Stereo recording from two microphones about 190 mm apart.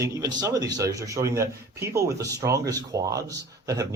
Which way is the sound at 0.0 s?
15° right (ahead or behind).